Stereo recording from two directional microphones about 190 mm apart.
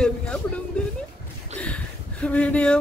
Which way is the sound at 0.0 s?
5° left (ahead or behind).